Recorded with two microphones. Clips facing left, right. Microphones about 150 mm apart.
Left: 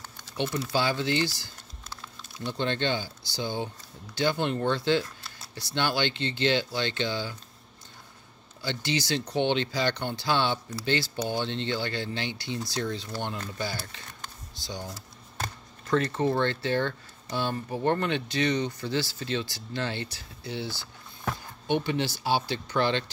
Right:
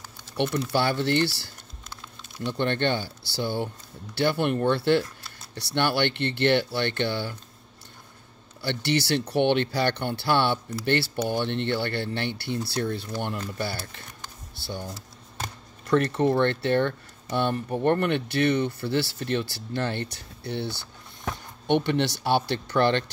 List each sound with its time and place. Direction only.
0.4 s speech: 60° right (ahead or behind)
8.6 s speech: 65° right (ahead or behind)
16.0 s speech: 60° right (ahead or behind)